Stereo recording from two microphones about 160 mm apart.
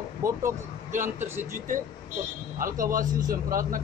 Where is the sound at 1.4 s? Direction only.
55° right (ahead or behind).